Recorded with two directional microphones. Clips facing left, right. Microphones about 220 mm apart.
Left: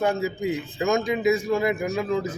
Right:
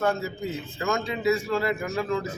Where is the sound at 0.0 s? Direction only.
15° left (ahead or behind).